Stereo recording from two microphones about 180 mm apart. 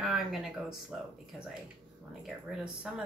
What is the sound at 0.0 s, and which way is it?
Speech, centre (ahead or behind).